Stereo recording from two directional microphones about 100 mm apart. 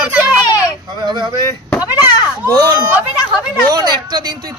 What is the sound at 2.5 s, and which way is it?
A man's voice, 40° right (ahead or behind).